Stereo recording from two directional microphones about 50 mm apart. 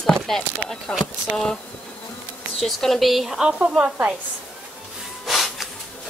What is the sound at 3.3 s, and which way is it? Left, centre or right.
Speech, right.